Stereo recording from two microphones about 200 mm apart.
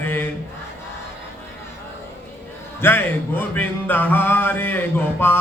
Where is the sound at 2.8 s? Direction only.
10° left (ahead or behind).